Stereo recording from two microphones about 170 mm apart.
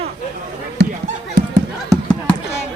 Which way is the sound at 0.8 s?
90° right.